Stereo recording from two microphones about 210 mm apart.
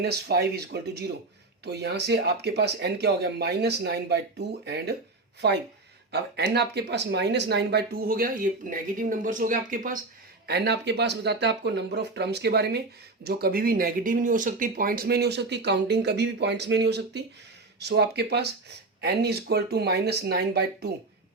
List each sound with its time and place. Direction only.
0.0 s speech: 50° right (ahead or behind)
6.1 s speech: 50° right (ahead or behind)